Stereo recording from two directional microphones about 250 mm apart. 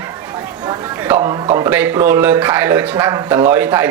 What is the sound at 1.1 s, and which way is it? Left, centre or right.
A man's voice, right.